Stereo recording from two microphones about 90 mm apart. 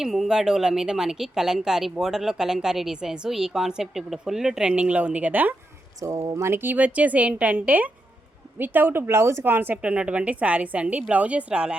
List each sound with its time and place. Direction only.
0.0 s speech: 5° right (ahead or behind); by 5.5 s 20° right (ahead or behind)
6.0 s a woman's voice: 40° right (ahead or behind); by 11.8 s 10° right (ahead or behind)